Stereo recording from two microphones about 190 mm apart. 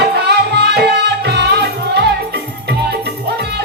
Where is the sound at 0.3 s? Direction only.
60° right (ahead or behind).